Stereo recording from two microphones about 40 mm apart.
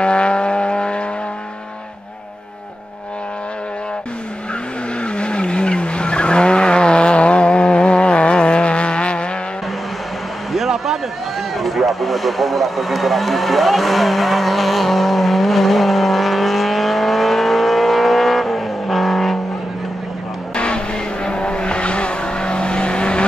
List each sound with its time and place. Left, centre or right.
0.0 s vehicle: left
5.0 s vehicle: left
10.5 s a sound: centre
11.5 s vehicle: centre
20.5 s vehicle: left